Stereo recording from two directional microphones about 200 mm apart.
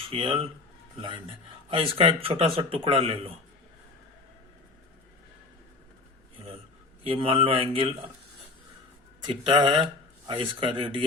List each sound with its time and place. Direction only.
0.1 s a man's voice: 25° right (ahead or behind)
1.9 s a man's voice: 25° right (ahead or behind)
7.0 s a man's voice: 25° right (ahead or behind)
9.2 s a man's voice: 25° right (ahead or behind)